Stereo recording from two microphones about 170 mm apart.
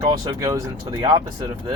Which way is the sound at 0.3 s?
20° right (ahead or behind).